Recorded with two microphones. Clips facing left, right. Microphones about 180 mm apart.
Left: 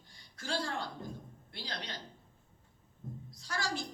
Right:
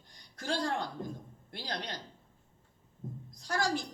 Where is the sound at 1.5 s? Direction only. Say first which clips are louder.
Right 4 dB; 50° right (ahead or behind).